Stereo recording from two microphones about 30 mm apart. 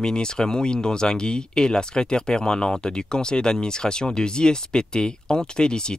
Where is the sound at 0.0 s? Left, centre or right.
Left.